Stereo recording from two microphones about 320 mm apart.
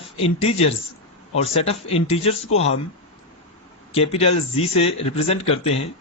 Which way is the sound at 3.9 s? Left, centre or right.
Centre.